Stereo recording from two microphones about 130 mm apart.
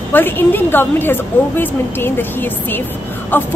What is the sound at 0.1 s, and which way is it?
Speech, 15° left (ahead or behind).